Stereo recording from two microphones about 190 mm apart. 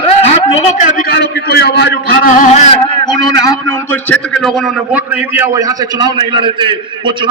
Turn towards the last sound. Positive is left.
turn(degrees=-25)  # may be behind; listen again after turning